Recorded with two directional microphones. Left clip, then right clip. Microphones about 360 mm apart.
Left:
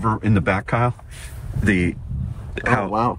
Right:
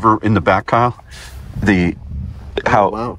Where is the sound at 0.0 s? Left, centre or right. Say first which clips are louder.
Right 8 dB; centre.